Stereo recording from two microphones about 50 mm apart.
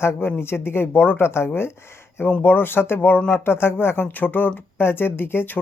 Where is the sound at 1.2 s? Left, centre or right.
Left.